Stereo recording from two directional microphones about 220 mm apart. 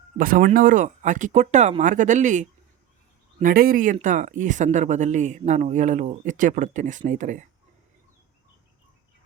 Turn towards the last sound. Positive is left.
turn(degrees=-35)  # may be behind; listen again after turning